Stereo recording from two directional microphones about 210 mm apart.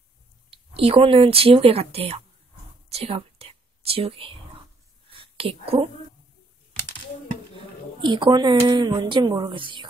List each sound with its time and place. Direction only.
0.5 s speech: 25° right (ahead or behind)
2.9 s whispering: 30° right (ahead or behind)
7.5 s speech: 20° right (ahead or behind)